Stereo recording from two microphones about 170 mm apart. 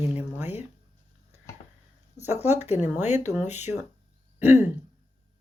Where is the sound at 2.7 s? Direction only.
10° right (ahead or behind).